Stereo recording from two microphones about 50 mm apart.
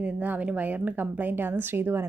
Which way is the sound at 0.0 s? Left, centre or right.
Right.